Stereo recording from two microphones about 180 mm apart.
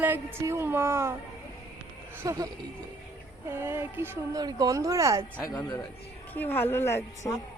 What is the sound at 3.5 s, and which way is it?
Speech, 15° right (ahead or behind).